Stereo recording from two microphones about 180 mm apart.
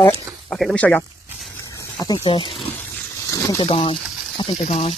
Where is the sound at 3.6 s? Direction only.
35° left (ahead or behind).